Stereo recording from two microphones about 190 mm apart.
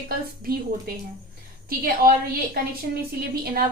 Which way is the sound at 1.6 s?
50° right (ahead or behind).